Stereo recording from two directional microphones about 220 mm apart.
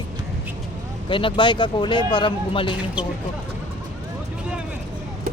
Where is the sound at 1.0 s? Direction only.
20° left (ahead or behind).